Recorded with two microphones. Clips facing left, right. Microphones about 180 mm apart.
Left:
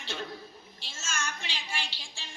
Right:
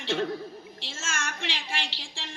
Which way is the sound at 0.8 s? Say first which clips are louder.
Right 1 dB; 90° right.